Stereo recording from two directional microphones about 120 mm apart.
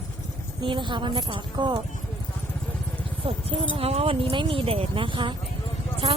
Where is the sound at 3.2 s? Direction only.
50° right (ahead or behind).